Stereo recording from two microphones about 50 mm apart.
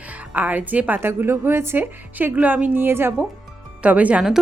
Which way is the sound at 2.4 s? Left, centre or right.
Right.